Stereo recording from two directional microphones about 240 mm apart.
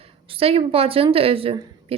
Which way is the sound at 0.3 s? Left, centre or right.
Right.